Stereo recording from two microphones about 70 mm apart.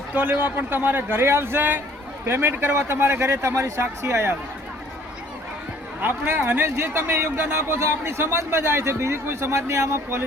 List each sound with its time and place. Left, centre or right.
0.1 s a man's voice: right
6.0 s a man's voice: right